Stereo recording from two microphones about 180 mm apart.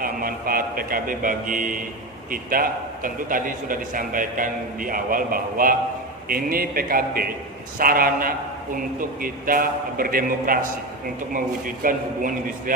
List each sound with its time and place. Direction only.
0.0 s a man's voice: 55° right (ahead or behind)